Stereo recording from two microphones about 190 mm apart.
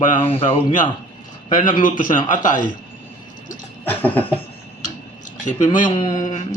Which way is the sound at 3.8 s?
10° left (ahead or behind).